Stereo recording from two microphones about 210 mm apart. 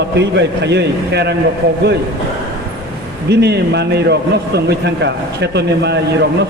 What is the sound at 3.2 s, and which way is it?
A man's voice, 55° right (ahead or behind).